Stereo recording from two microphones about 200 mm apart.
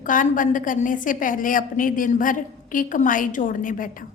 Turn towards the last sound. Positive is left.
turn(degrees=40)  # may be behind; listen again after turning